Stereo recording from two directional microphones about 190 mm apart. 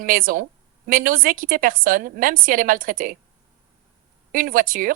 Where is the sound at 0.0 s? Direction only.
45° right (ahead or behind).